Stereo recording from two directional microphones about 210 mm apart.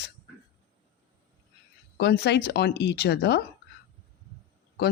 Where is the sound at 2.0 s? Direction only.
50° left (ahead or behind).